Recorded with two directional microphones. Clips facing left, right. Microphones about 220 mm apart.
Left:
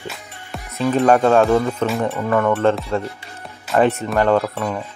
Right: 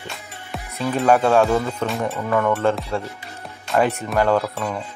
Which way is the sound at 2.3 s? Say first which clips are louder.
Left 2 dB; 10° left (ahead or behind).